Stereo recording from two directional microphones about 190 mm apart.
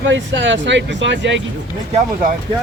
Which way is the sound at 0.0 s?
75° right (ahead or behind).